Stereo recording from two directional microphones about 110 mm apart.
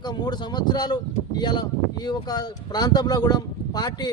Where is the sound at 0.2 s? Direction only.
40° left (ahead or behind).